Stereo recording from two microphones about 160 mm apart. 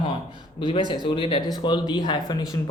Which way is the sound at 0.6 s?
30° left (ahead or behind).